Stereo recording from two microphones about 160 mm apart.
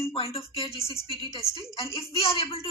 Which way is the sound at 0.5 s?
35° left (ahead or behind).